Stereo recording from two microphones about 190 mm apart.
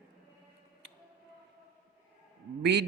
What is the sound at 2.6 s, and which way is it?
Speech, 60° right (ahead or behind).